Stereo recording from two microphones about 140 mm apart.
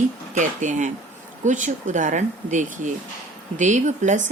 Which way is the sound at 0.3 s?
65° right (ahead or behind).